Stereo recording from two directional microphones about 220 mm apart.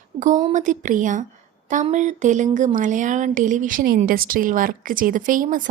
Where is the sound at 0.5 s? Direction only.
35° right (ahead or behind).